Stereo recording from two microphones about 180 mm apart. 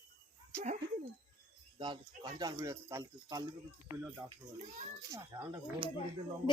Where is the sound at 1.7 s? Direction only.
25° right (ahead or behind).